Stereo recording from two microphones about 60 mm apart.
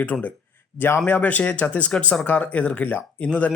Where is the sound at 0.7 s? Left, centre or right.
Left.